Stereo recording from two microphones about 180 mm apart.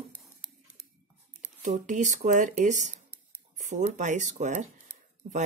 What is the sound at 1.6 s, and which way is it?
Speech, 45° right (ahead or behind).